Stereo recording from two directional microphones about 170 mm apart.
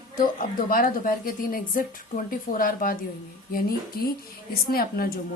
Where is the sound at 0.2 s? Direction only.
55° left (ahead or behind).